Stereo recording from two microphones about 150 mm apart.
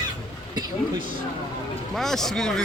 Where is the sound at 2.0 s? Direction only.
Centre (ahead or behind).